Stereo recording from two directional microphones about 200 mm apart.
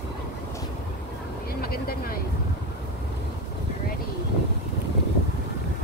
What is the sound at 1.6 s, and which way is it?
Vehicle, 50° left (ahead or behind).